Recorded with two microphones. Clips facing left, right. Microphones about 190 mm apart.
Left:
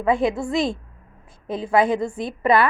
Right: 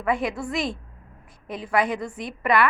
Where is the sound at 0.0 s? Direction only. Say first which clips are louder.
Left 5 dB; 25° left (ahead or behind).